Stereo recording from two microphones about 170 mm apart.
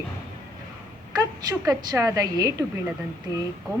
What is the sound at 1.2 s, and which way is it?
A woman's voice, 20° right (ahead or behind).